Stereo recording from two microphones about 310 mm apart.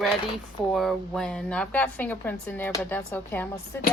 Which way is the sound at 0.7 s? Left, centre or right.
Centre.